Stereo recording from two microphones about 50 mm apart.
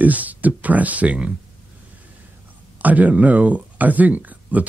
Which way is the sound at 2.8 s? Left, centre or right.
Right.